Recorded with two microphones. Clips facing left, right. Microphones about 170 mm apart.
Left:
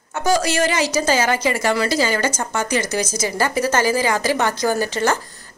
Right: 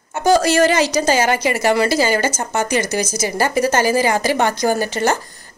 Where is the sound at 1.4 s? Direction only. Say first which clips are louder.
Right 3 dB; 20° right (ahead or behind).